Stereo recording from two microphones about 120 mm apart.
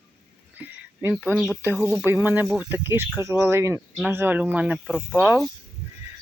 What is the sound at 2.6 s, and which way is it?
Speech, 20° right (ahead or behind).